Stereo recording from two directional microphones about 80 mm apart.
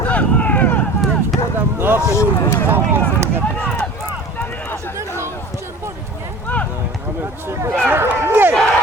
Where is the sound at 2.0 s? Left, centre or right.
Left.